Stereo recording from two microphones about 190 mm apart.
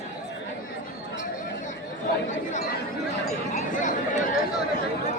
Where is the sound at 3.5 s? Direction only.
40° left (ahead or behind).